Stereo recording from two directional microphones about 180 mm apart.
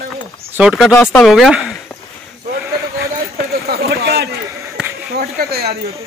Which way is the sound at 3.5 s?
60° right (ahead or behind).